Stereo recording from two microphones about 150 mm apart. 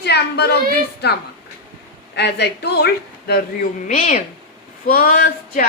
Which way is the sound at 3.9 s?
60° left (ahead or behind).